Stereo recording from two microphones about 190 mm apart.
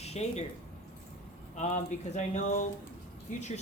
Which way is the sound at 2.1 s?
40° left (ahead or behind).